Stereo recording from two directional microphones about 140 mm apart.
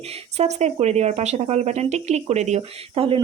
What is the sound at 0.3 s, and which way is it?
Speech, 50° right (ahead or behind).